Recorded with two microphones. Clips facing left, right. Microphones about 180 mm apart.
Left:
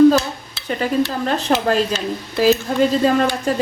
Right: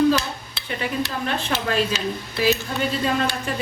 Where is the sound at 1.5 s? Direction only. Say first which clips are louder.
Left 6 dB; 40° left (ahead or behind).